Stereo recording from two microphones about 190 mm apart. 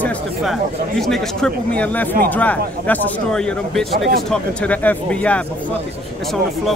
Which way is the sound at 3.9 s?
60° right (ahead or behind).